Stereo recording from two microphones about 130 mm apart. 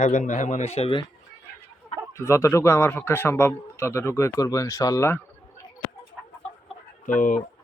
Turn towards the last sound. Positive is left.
turn(degrees=90)